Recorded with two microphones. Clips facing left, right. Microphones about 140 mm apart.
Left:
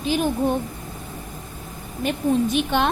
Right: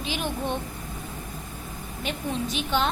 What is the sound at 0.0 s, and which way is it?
Speech, 45° left (ahead or behind).